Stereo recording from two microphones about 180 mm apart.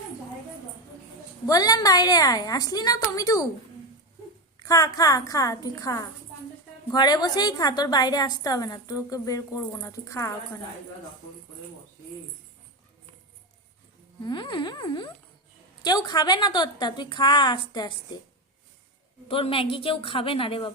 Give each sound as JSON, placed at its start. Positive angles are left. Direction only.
{"t": 1.5, "sound": "a woman's voice", "side_deg": 20}
{"t": 4.6, "sound": "a woman's voice", "side_deg": 20}
{"t": 14.3, "sound": "a woman's voice", "side_deg": 25}
{"t": 19.3, "sound": "a woman's voice", "side_deg": 30}